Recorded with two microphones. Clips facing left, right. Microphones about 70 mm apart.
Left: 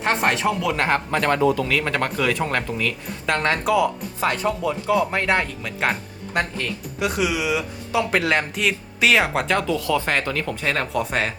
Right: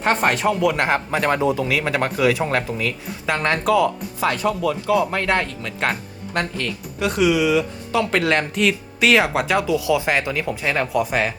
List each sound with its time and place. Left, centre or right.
0.0 s speech: centre
4.4 s speech: left; by 11.3 s centre